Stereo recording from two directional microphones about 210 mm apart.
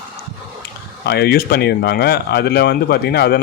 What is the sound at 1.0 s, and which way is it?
Speech, 50° left (ahead or behind).